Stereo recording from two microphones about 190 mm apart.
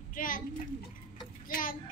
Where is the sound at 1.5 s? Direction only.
45° left (ahead or behind).